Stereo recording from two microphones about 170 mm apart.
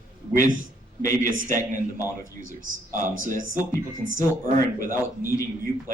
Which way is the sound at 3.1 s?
50° right (ahead or behind).